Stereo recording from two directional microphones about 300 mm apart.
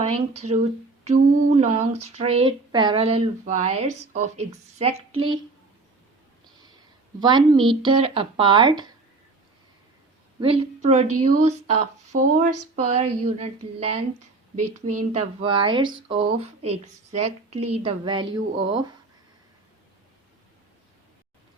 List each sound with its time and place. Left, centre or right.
0.3 s speech: right
7.2 s speech: centre
10.4 s speech: centre
14.6 s speech: right
15.1 s speech: centre